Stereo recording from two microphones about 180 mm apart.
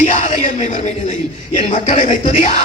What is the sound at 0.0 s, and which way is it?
Music, 45° left (ahead or behind).